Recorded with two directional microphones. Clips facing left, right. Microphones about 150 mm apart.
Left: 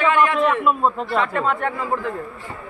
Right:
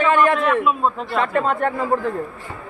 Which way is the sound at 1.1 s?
40° right (ahead or behind).